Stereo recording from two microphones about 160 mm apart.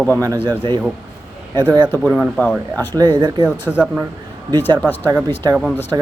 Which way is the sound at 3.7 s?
10° right (ahead or behind).